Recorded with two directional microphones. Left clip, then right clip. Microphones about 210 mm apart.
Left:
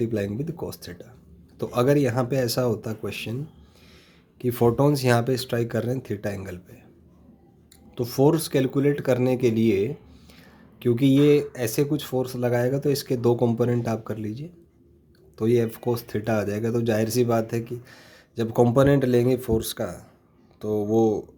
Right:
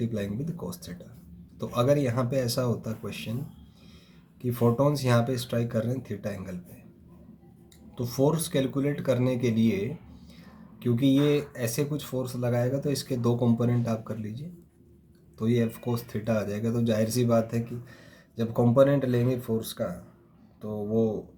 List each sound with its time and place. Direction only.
0.0 s speech: 40° left (ahead or behind)
4.4 s speech: 40° left (ahead or behind)
7.9 s speech: 40° left (ahead or behind)
15.4 s speech: 40° left (ahead or behind)